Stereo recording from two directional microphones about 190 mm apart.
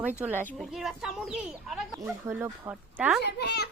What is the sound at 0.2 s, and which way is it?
Speech, 10° right (ahead or behind).